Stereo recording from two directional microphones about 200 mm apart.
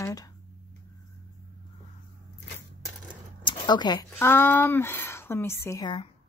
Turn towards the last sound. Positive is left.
turn(degrees=20)  # may be behind; listen again after turning